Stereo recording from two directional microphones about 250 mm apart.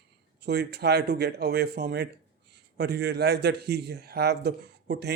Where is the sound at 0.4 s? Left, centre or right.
Right.